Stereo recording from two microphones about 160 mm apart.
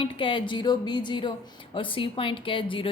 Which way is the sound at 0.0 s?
35° left (ahead or behind).